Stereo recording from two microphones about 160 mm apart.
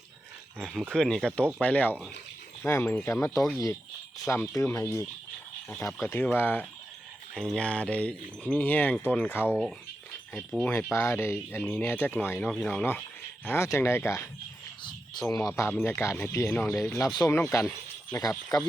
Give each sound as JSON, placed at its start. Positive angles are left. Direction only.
{"t": 0.6, "sound": "speech", "side_deg": 0}
{"t": 10.5, "sound": "speech", "side_deg": 10}
{"t": 12.5, "sound": "speech", "side_deg": 0}
{"t": 13.4, "sound": "speech", "side_deg": 15}
{"t": 14.8, "sound": "a sound", "side_deg": 30}
{"t": 15.4, "sound": "speech", "side_deg": 15}